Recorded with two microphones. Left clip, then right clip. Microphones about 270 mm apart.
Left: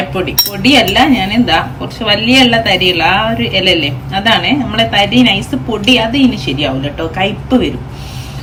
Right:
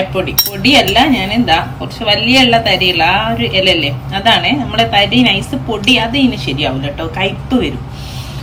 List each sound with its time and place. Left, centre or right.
0.6 s a woman's voice: centre